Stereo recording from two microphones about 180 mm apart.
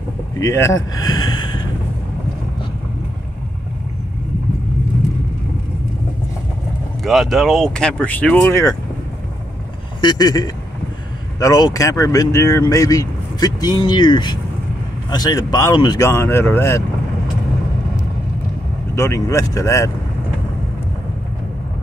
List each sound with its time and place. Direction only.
0.4 s speech: 15° left (ahead or behind)
0.9 s a sound: 20° left (ahead or behind)
7.0 s speech: centre (ahead or behind)
10.0 s speech: 20° left (ahead or behind)
18.9 s speech: 15° left (ahead or behind)